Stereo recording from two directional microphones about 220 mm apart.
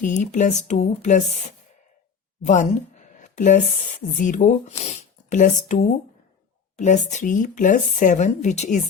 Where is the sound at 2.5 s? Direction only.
35° left (ahead or behind).